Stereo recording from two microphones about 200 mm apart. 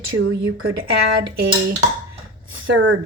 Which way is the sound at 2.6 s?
70° right (ahead or behind).